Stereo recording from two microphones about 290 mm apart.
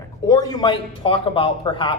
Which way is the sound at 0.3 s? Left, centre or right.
Centre.